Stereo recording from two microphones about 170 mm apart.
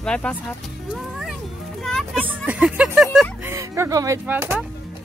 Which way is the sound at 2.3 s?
5° right (ahead or behind).